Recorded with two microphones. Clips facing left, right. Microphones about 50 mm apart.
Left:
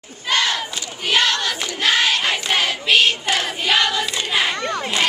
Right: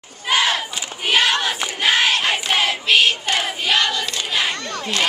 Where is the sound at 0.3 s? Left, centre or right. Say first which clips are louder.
Right 1 dB; centre.